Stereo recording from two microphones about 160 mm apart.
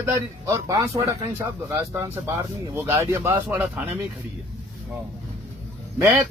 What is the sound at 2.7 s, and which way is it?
Speech, 15° right (ahead or behind).